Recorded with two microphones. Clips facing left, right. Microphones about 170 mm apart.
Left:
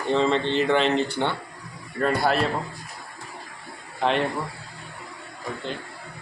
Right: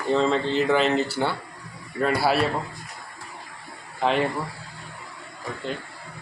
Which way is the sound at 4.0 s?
5° right (ahead or behind).